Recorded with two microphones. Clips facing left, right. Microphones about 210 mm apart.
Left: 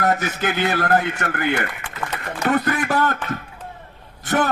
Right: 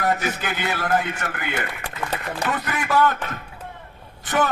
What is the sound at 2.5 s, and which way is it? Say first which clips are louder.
Speech: left 6 dB; 45° left (ahead or behind).